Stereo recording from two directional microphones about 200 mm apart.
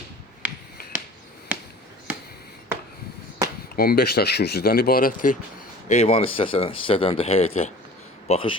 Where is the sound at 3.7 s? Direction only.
50° left (ahead or behind).